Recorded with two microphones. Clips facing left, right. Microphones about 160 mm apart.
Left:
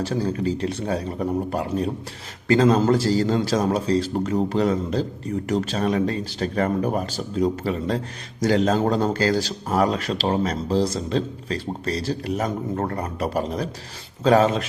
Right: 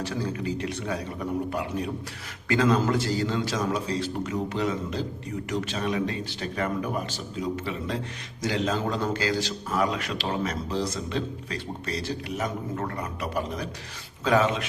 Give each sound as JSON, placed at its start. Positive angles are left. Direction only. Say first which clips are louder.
{"t": 0.0, "sound": "speech", "louder": "left 6 dB", "side_deg": 35}